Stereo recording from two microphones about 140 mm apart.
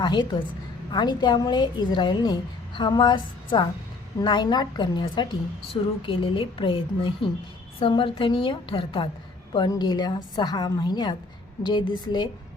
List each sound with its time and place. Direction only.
0.0 s a woman's voice: 35° left (ahead or behind)